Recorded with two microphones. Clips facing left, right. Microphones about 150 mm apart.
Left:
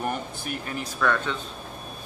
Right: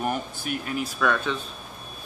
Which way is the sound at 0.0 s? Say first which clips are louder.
Right 2 dB; 10° right (ahead or behind).